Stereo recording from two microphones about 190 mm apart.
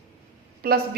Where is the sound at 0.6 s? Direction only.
50° right (ahead or behind).